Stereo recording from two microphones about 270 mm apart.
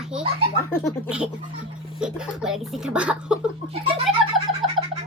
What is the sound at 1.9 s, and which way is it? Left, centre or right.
Speech, centre.